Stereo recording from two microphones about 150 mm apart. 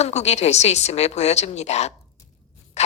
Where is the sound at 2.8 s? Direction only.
45° left (ahead or behind).